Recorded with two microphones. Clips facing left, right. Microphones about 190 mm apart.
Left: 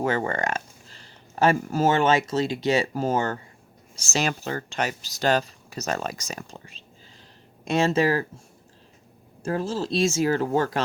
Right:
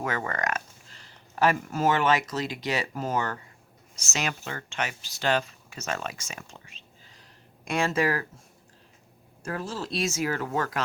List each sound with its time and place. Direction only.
0.0 s speech: 30° left (ahead or behind)
7.6 s speech: 25° left (ahead or behind)
9.4 s speech: 25° left (ahead or behind)